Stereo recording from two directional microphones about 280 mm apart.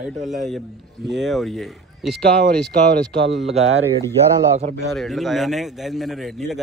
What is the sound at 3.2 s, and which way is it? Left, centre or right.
Speech, right.